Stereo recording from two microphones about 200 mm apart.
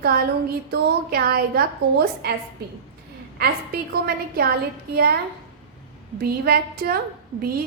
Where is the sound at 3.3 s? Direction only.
50° right (ahead or behind).